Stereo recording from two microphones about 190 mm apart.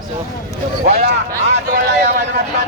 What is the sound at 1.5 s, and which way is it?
Speech, 40° right (ahead or behind).